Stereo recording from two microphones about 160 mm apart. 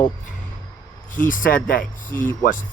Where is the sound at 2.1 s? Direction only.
10° left (ahead or behind).